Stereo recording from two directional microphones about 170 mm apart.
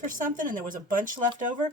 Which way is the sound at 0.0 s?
50° right (ahead or behind).